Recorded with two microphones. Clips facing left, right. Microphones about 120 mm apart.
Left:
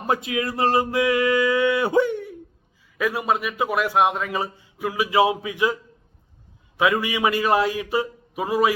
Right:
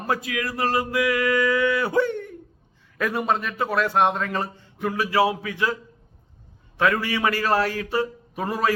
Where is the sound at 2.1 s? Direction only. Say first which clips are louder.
Left 2 dB; 5° left (ahead or behind).